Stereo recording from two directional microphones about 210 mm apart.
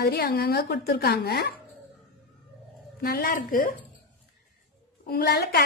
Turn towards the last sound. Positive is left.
turn(degrees=50)  # may be behind; listen again after turning